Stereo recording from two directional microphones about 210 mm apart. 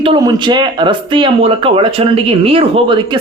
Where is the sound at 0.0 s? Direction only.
20° right (ahead or behind).